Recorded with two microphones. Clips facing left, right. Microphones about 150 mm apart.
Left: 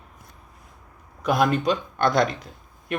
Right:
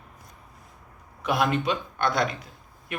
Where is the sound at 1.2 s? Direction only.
40° left (ahead or behind).